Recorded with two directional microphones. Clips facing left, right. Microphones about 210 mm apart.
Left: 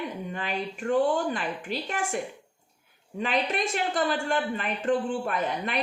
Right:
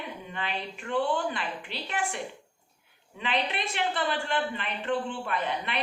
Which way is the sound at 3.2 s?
45° left (ahead or behind).